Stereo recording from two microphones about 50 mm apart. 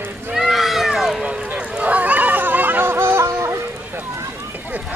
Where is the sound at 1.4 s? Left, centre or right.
Right.